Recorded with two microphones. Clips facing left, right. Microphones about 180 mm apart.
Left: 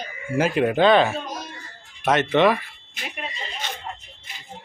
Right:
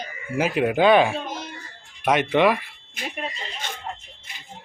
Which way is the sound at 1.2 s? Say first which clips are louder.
Right 1 dB; 25° right (ahead or behind).